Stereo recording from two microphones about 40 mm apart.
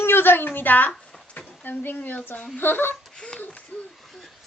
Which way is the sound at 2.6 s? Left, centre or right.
Left.